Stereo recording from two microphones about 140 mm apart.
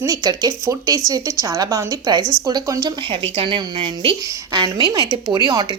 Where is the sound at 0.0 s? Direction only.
25° right (ahead or behind).